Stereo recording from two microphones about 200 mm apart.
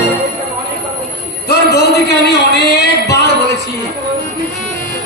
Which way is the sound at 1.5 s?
55° left (ahead or behind).